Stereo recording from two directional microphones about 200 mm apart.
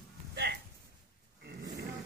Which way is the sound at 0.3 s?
55° right (ahead or behind).